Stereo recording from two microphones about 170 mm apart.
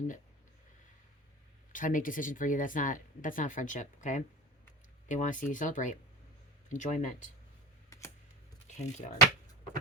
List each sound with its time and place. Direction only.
1.7 s speech: 50° left (ahead or behind)
7.9 s a sound: 15° left (ahead or behind)
8.6 s speech: 45° left (ahead or behind)